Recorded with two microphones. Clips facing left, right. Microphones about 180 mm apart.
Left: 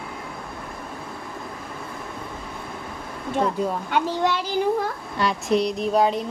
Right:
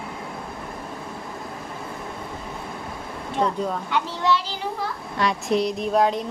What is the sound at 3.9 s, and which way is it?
Speech, 50° left (ahead or behind).